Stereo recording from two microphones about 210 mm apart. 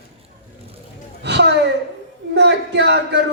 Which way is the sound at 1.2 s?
55° right (ahead or behind).